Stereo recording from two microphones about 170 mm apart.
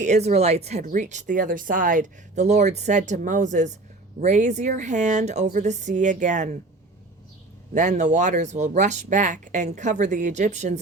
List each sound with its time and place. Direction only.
0.0 s speech: 40° right (ahead or behind)
7.7 s speech: 45° right (ahead or behind)